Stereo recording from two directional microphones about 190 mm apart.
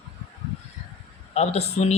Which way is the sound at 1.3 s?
35° left (ahead or behind).